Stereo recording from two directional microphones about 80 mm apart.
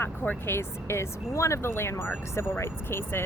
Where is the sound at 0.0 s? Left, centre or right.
Left.